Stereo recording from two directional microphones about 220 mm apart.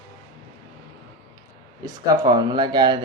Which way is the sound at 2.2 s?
20° right (ahead or behind).